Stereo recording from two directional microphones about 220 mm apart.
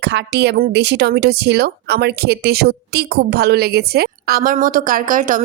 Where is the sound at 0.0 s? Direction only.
50° right (ahead or behind).